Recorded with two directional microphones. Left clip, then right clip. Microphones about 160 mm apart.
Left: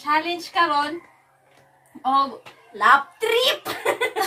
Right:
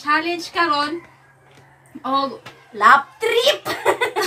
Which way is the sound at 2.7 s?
15° left (ahead or behind).